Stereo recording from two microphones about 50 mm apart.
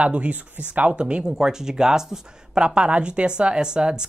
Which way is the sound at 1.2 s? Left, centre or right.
Centre.